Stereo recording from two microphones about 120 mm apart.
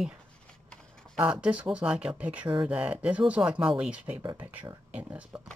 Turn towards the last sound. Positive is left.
turn(degrees=-10)  # may be behind; listen again after turning